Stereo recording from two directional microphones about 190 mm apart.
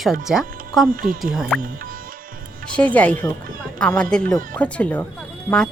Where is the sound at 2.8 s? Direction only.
5° left (ahead or behind).